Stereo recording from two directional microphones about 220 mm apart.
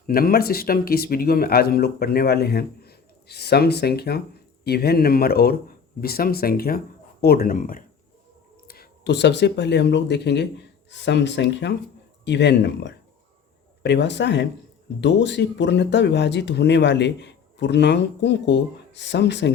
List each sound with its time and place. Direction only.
0.1 s speech: 45° left (ahead or behind)